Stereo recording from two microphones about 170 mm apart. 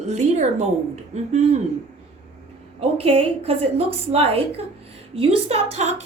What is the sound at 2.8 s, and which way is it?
A woman's voice, 35° right (ahead or behind).